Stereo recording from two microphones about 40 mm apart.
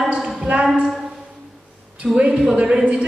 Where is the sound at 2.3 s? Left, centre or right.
Centre.